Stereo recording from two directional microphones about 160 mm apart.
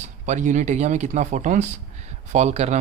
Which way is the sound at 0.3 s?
50° right (ahead or behind).